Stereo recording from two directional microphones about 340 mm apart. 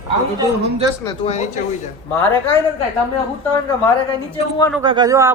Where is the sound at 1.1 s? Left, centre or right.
Centre.